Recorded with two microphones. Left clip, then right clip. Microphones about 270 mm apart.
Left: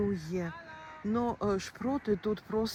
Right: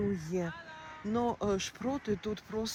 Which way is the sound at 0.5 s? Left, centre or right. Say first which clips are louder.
Even; left.